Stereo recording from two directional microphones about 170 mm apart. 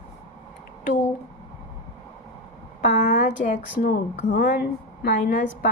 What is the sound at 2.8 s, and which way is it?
Speech, 45° left (ahead or behind).